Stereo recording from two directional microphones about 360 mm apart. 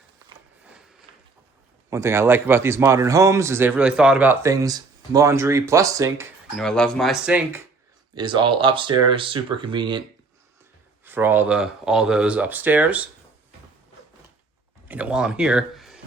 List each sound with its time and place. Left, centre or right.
1.9 s speech: centre
11.0 s speech: centre
14.8 s speech: centre